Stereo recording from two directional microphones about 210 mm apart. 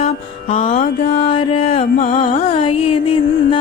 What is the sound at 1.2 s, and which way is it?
Music, 25° left (ahead or behind).